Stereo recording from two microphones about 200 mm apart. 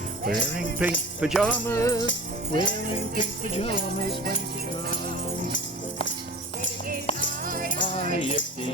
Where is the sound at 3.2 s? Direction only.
30° left (ahead or behind).